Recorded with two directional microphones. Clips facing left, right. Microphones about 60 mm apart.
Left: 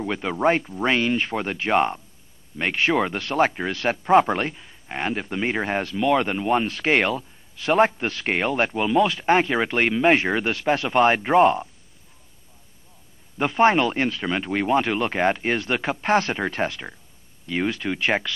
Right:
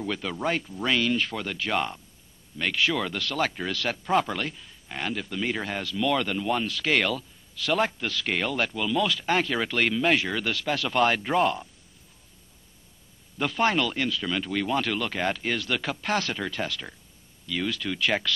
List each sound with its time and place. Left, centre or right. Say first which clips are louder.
0.0 s speech: left 7 dB; left
13.4 s speech: left 6 dB; left